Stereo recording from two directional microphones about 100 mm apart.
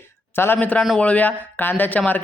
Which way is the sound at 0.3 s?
20° left (ahead or behind).